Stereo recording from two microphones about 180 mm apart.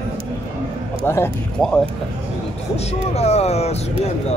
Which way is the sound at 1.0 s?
15° left (ahead or behind).